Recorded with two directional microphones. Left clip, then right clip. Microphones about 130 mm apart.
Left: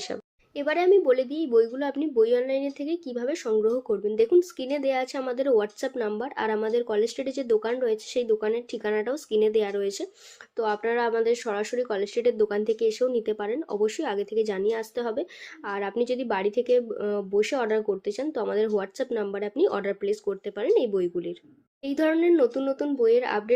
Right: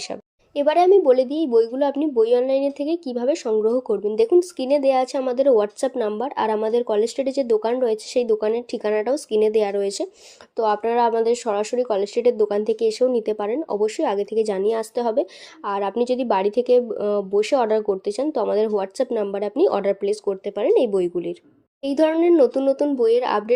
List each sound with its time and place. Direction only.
0.1 s a woman's voice: 25° right (ahead or behind)